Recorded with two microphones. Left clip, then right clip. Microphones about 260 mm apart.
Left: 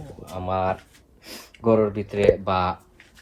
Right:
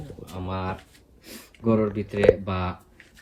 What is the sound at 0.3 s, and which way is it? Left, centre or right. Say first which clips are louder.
Speech: left 8 dB; centre.